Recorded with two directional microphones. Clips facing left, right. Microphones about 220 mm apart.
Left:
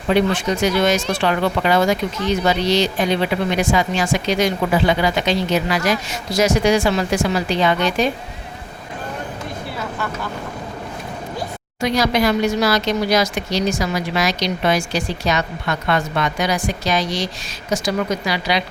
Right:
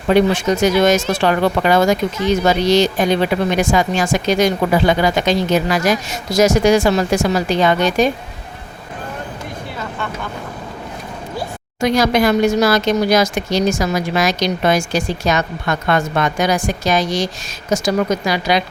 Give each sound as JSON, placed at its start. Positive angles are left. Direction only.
{"t": 0.1, "sound": "speech", "side_deg": -45}
{"t": 11.8, "sound": "speech", "side_deg": -50}